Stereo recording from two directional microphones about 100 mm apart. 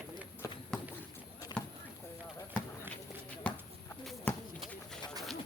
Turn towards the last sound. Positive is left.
turn(degrees=15)  # may be behind; listen again after turning